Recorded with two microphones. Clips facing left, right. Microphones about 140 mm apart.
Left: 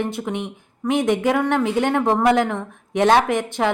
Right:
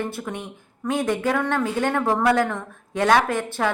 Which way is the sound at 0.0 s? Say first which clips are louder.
Left 4 dB; 15° left (ahead or behind).